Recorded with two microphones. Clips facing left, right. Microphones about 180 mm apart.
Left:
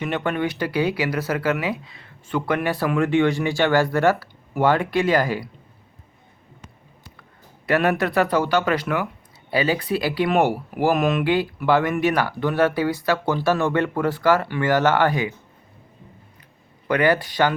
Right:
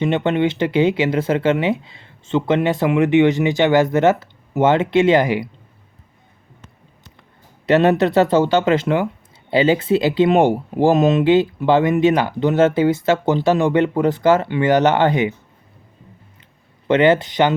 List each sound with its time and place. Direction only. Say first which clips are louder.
0.0 s speech: right 6 dB; 25° right (ahead or behind)
7.7 s speech: right 6 dB; 25° right (ahead or behind)
16.9 s speech: right 5 dB; 20° right (ahead or behind)